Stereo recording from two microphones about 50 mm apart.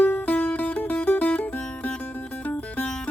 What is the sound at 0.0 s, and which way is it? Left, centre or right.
Music, left.